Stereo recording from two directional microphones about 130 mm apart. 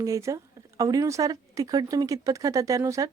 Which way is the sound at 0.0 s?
25° right (ahead or behind).